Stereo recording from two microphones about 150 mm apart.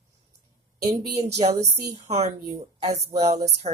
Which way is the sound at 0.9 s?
45° right (ahead or behind).